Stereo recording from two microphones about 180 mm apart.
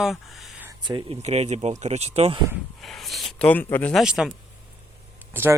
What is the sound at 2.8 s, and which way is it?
Speech, centre (ahead or behind).